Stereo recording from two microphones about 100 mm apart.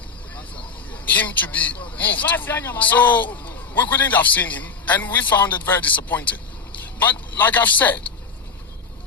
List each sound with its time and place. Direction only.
0.3 s vehicle: 15° left (ahead or behind)
2.0 s a man's voice: 15° left (ahead or behind)